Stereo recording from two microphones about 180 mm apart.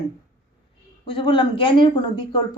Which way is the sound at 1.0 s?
30° left (ahead or behind).